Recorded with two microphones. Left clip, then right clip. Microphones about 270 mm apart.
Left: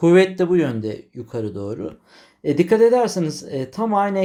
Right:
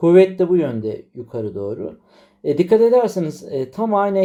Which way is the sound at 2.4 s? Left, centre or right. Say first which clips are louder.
Right 1 dB; left.